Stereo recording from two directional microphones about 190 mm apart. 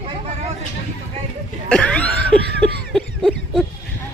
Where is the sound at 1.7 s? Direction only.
5° left (ahead or behind).